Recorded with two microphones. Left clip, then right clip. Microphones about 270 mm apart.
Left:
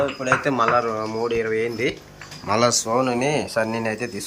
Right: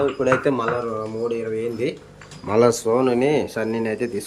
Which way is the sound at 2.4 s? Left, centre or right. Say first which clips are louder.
Right 2 dB; centre.